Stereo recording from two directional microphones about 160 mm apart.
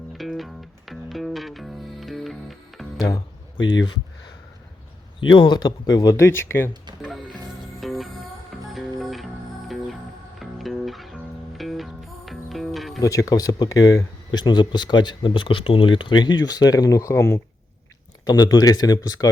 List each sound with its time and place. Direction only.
0.2 s music: centre (ahead or behind)
5.3 s speech: 30° left (ahead or behind)
7.8 s music: centre (ahead or behind)
13.0 s speech: 20° left (ahead or behind)